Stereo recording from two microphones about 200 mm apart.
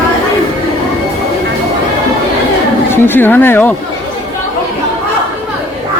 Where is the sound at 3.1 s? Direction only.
10° left (ahead or behind).